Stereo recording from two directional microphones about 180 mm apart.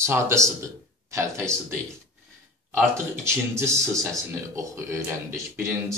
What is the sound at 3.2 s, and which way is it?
Speech, 15° right (ahead or behind).